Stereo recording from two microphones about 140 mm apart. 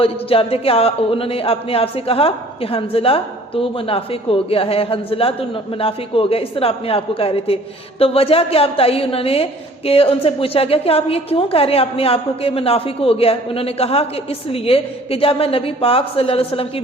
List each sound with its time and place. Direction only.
0.0 s a man's voice: 40° left (ahead or behind)